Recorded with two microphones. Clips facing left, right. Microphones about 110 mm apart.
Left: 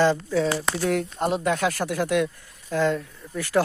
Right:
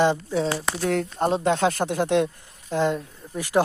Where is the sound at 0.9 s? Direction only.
35° right (ahead or behind); by 3.6 s 20° right (ahead or behind).